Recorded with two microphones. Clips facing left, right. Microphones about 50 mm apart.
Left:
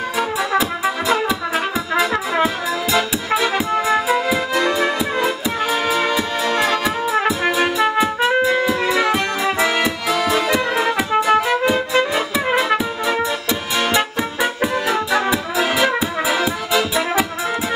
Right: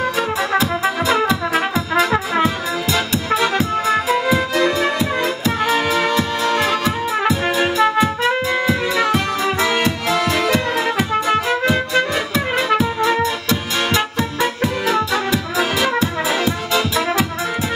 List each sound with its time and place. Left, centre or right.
0.6 s music: centre
9.0 s music: centre